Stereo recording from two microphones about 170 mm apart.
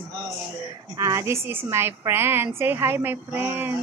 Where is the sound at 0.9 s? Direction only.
20° right (ahead or behind).